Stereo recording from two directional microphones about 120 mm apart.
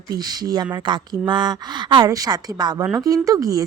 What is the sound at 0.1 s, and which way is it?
Speech, 35° right (ahead or behind).